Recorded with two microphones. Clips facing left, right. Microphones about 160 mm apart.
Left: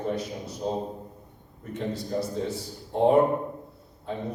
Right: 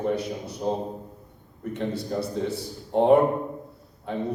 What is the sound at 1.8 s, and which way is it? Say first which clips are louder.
Speech: right 1 dB; 65° right (ahead or behind).